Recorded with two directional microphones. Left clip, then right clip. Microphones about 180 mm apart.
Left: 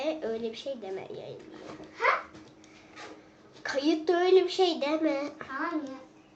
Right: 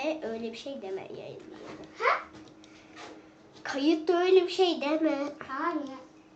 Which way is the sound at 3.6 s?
Centre (ahead or behind).